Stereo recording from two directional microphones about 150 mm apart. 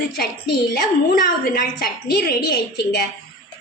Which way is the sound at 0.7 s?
85° left.